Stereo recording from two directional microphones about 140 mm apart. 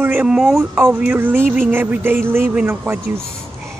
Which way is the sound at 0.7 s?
15° right (ahead or behind).